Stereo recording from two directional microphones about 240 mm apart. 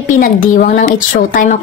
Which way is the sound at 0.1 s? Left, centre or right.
Left.